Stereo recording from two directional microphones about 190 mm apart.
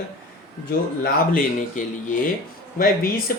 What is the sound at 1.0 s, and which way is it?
A man's voice, 45° left (ahead or behind).